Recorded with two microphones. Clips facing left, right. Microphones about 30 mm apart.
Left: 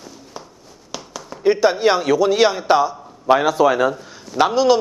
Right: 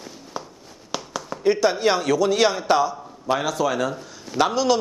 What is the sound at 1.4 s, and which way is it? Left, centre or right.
A man's voice, centre.